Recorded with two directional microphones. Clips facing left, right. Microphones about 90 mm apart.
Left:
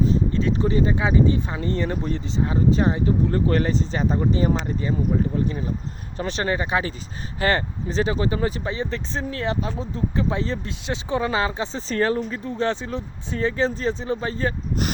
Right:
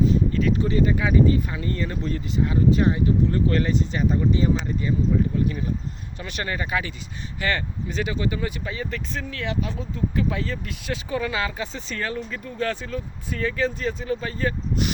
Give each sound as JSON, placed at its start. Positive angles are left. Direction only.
{"t": 0.0, "sound": "speech", "side_deg": 30}